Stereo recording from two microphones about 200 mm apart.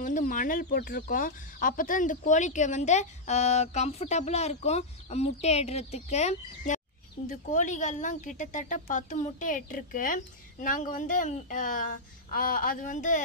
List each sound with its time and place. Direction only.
0.0 s speech: 40° left (ahead or behind)